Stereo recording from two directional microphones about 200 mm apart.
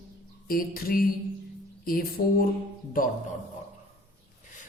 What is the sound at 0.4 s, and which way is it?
A woman's voice, 45° left (ahead or behind).